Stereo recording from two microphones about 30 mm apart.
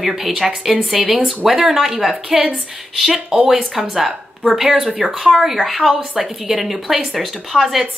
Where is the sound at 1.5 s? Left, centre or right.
Right.